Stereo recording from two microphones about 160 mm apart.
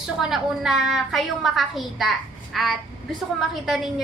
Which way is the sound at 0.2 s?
Centre (ahead or behind).